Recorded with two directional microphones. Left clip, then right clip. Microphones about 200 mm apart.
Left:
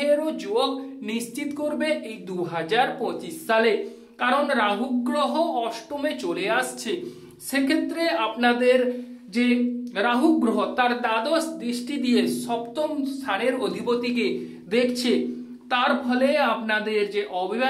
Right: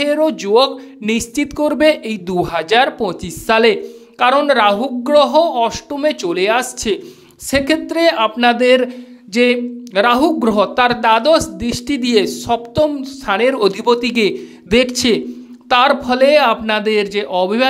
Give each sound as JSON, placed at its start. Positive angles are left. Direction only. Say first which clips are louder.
{"t": 0.0, "sound": "speech", "louder": "right 8 dB", "side_deg": -50}